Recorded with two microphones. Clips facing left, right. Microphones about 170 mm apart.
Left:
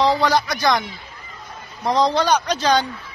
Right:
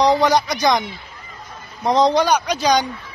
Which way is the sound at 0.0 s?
20° right (ahead or behind).